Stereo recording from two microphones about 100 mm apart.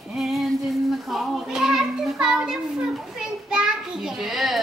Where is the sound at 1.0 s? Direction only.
Centre (ahead or behind).